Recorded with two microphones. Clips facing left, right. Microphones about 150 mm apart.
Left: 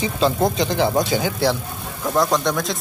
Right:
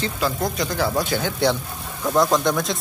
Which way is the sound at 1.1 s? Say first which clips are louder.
Left 1 dB; 10° left (ahead or behind).